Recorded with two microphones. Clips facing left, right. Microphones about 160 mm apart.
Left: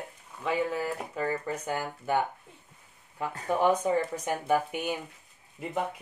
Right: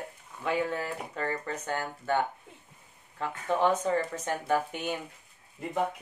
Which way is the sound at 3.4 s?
10° left (ahead or behind).